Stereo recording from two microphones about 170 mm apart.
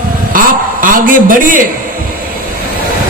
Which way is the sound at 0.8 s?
55° right (ahead or behind).